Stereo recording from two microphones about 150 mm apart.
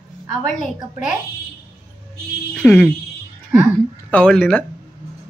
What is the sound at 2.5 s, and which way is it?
Speech, 10° left (ahead or behind).